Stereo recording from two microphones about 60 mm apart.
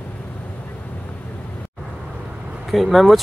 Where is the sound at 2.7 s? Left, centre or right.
Centre.